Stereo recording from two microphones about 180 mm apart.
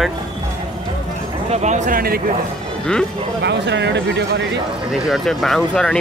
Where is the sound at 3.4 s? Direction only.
70° right (ahead or behind).